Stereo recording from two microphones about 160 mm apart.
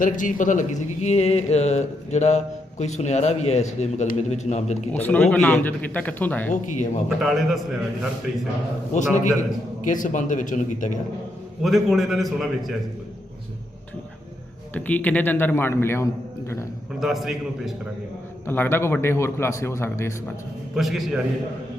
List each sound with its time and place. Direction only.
0.0 s speech: 55° left (ahead or behind)
5.0 s a man's voice: 10° left (ahead or behind)
6.5 s speech: 50° left (ahead or behind)
7.2 s a man's voice: centre (ahead or behind)
8.9 s speech: 50° left (ahead or behind)
11.6 s a man's voice: centre (ahead or behind)
14.7 s a man's voice: 10° left (ahead or behind)
17.0 s a man's voice: centre (ahead or behind)
18.4 s a man's voice: 15° left (ahead or behind)
20.7 s a man's voice: centre (ahead or behind)